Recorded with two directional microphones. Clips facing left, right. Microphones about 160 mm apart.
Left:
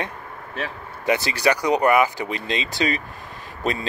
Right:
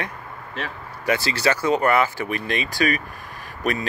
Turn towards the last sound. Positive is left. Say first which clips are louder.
# right 1 dB
turn(degrees=25)  # may be behind; listen again after turning